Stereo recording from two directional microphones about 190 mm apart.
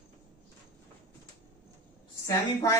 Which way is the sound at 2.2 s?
15° left (ahead or behind).